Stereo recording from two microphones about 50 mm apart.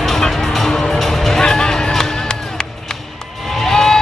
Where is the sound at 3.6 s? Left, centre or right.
Centre.